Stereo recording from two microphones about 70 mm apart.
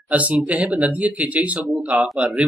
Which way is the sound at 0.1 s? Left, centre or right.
Right.